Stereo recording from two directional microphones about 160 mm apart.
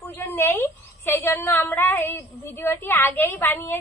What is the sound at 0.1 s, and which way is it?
A woman's voice, 15° left (ahead or behind).